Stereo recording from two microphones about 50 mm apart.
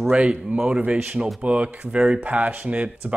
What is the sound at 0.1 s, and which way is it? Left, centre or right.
Speech, right.